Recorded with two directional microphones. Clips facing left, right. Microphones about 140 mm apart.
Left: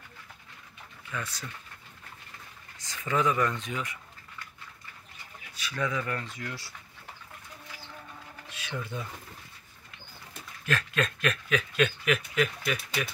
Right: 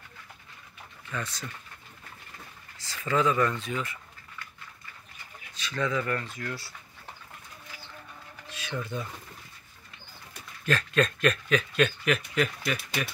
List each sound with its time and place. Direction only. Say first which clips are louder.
1.1 s speech: right 2 dB; 10° left (ahead or behind)
2.8 s speech: right 2 dB; 15° left (ahead or behind)
5.5 s speech: right 2 dB; 10° left (ahead or behind)
8.5 s speech: right 3 dB; 10° left (ahead or behind)
10.7 s speech: right 4 dB; 5° left (ahead or behind)